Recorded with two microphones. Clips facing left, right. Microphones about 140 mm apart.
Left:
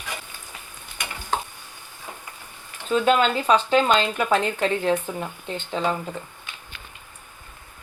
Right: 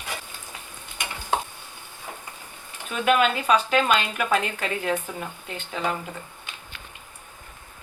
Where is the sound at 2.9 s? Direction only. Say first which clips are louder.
Left 2 dB; 30° left (ahead or behind).